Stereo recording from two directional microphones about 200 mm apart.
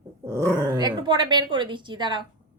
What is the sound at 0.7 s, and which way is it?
A woman's voice, 20° right (ahead or behind).